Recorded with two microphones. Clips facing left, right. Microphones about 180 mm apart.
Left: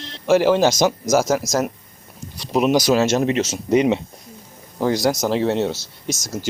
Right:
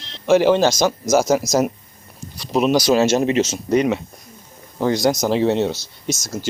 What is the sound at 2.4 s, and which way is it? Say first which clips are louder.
Speech: even; 15° left (ahead or behind).